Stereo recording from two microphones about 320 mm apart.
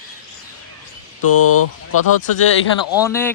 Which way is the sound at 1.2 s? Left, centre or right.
Left.